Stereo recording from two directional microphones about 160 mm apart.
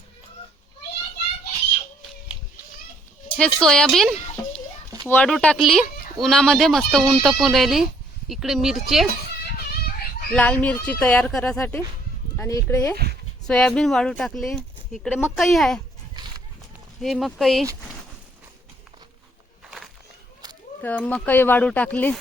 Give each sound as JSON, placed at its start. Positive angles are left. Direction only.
{"t": 3.3, "sound": "speech", "side_deg": 5}
{"t": 10.3, "sound": "speech", "side_deg": 10}
{"t": 12.4, "sound": "speech", "side_deg": 20}
{"t": 13.5, "sound": "speech", "side_deg": 5}
{"t": 17.0, "sound": "speech", "side_deg": 0}
{"t": 19.6, "sound": "a sound", "side_deg": 0}
{"t": 20.8, "sound": "speech", "side_deg": 10}